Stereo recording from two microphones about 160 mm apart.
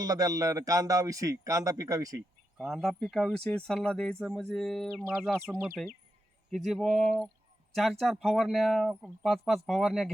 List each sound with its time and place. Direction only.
0.0 s speech: 20° right (ahead or behind)
2.6 s speech: centre (ahead or behind)